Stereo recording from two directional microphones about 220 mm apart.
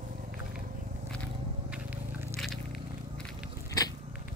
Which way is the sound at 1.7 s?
10° right (ahead or behind).